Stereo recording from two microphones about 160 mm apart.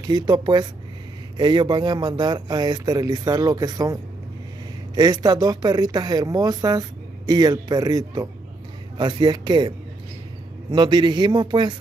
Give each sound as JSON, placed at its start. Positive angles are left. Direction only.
{"t": 0.0, "sound": "speech", "side_deg": -25}